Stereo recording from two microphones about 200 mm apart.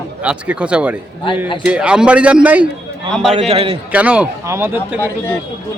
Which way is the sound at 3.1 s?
5° left (ahead or behind).